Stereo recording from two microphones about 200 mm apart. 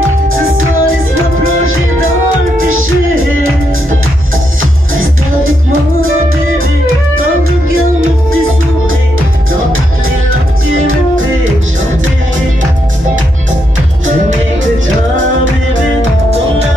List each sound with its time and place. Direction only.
0.3 s music: 90° right
5.4 s music: 90° right